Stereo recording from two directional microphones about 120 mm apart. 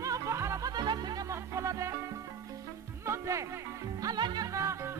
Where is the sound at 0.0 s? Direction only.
25° right (ahead or behind).